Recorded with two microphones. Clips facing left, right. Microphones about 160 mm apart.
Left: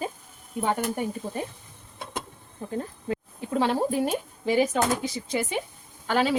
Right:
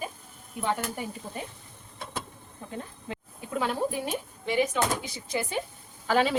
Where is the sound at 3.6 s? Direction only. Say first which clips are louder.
Left 5 dB; 30° left (ahead or behind).